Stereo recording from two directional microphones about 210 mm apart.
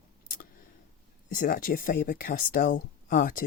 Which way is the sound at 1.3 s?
40° left (ahead or behind).